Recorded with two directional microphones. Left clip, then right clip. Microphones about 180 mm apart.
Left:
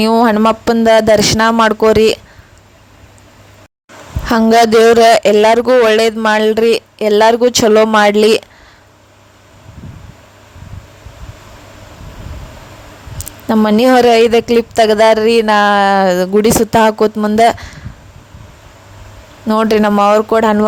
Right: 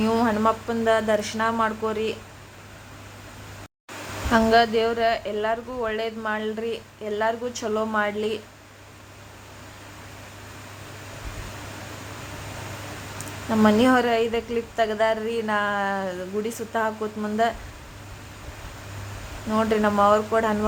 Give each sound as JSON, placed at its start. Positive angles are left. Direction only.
{"t": 0.0, "sound": "speech", "side_deg": 55}
{"t": 4.3, "sound": "speech", "side_deg": 75}
{"t": 13.1, "sound": "speech", "side_deg": 55}
{"t": 19.5, "sound": "speech", "side_deg": 60}